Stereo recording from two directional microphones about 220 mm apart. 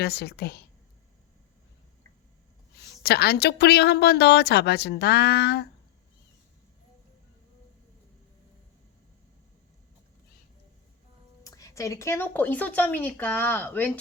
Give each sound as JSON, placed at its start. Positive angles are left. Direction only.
{"t": 0.0, "sound": "a woman's voice", "side_deg": 45}
{"t": 2.8, "sound": "a woman's voice", "side_deg": 45}
{"t": 11.4, "sound": "a woman's voice", "side_deg": 15}